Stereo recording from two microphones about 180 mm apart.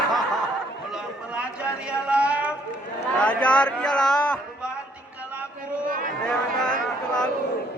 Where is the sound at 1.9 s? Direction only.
5° right (ahead or behind).